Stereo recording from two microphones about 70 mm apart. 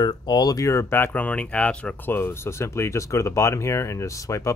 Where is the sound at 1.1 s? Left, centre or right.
Left.